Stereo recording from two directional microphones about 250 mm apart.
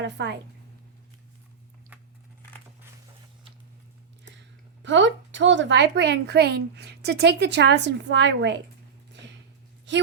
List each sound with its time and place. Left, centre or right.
0.0 s a woman's voice: right
4.3 s a woman's voice: right